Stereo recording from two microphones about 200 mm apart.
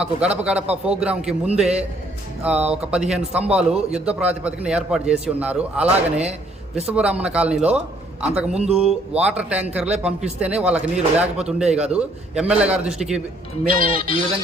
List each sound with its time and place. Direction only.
0.0 s speech: 5° right (ahead or behind)
13.7 s speech: 25° left (ahead or behind)